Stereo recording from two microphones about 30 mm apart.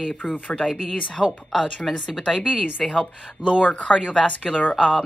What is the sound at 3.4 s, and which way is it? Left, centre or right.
Speech, left.